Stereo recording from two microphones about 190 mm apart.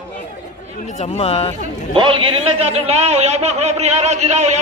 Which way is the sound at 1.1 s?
30° left (ahead or behind).